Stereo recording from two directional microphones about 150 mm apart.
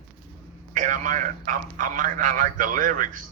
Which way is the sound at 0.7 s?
55° right (ahead or behind).